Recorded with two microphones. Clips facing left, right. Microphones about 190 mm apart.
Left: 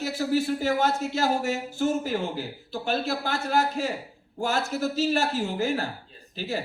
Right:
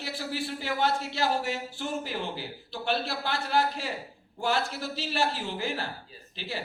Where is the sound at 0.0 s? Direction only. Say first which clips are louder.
Left 9 dB; 45° left (ahead or behind).